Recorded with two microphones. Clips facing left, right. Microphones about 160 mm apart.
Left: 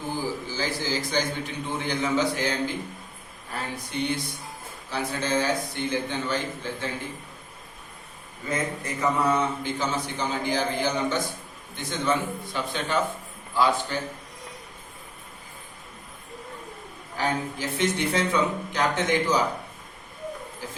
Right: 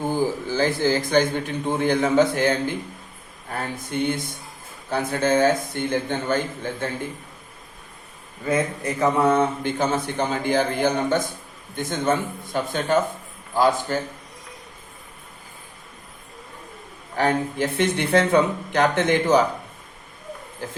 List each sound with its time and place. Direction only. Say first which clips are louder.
0.1 s a man's voice: right 4 dB; 55° right (ahead or behind)
9.0 s speech: right 5 dB; 55° right (ahead or behind)
17.2 s speech: right 6 dB; 60° right (ahead or behind)